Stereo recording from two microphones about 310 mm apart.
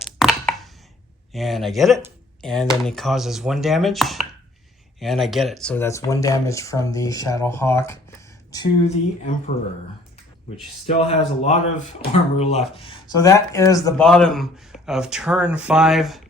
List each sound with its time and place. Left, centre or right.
0.0 s a sound: centre
1.3 s speech: centre
10.8 s speech: centre